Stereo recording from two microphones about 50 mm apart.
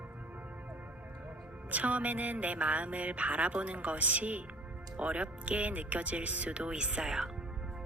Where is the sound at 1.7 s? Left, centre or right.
Right.